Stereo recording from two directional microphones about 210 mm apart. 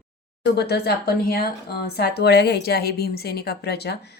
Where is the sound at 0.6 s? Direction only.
50° left (ahead or behind).